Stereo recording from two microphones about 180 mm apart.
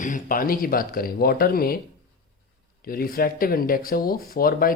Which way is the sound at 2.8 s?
55° left (ahead or behind).